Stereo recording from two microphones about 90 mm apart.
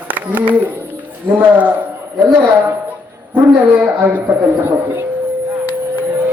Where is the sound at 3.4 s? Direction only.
20° right (ahead or behind).